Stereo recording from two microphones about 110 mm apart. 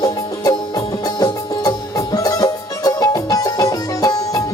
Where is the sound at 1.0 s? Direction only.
35° left (ahead or behind).